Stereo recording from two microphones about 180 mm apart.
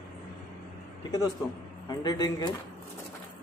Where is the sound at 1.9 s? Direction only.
20° left (ahead or behind).